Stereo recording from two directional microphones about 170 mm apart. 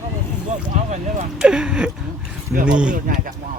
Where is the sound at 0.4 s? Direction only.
45° right (ahead or behind).